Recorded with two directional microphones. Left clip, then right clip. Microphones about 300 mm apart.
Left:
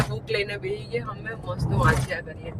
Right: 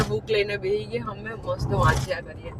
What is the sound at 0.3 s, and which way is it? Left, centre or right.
Speech, centre.